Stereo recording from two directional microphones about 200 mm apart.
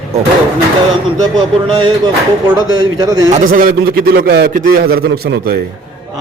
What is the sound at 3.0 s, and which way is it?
Speech, 20° right (ahead or behind).